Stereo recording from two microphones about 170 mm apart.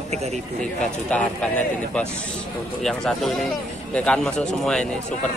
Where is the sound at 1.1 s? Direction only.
10° left (ahead or behind).